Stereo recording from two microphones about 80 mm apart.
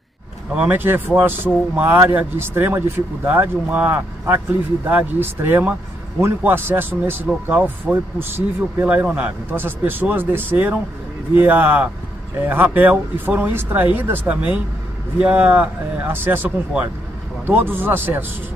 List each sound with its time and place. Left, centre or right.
0.6 s speech: right